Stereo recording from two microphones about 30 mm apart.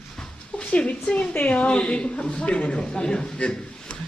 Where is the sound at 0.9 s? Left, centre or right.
Left.